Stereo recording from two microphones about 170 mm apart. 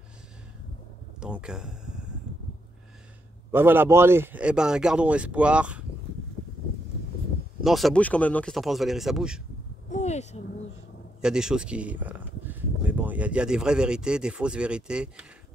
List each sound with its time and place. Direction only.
1.2 s speech: 5° right (ahead or behind)
3.5 s a man's voice: 10° right (ahead or behind)
7.6 s speech: centre (ahead or behind)
9.8 s a sound: 45° left (ahead or behind)
11.1 s speech: 5° right (ahead or behind)